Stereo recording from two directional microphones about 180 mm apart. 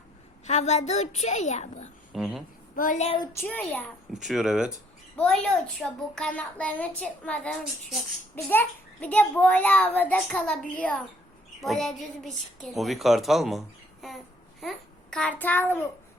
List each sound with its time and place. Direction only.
0.4 s a woman's voice: 40° left (ahead or behind)
2.1 s a woman's voice: centre (ahead or behind)
2.7 s a woman's voice: 45° left (ahead or behind)
3.4 s a child's voice: 10° left (ahead or behind)
4.1 s a woman's voice: centre (ahead or behind)